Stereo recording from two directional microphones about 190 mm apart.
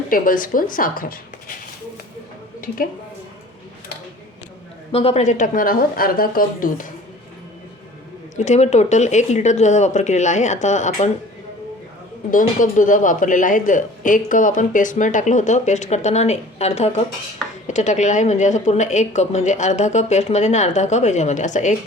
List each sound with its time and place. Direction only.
0.1 s speech: 45° left (ahead or behind)
4.9 s speech: 30° left (ahead or behind); by 6.8 s 45° left (ahead or behind)
8.4 s speech: 35° left (ahead or behind)
12.3 s speech: 45° left (ahead or behind)